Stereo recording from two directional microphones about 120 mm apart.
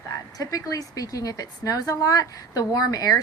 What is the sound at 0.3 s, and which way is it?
A woman's voice, 30° left (ahead or behind).